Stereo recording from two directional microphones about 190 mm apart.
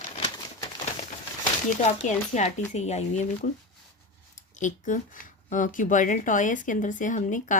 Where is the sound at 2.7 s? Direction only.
35° left (ahead or behind).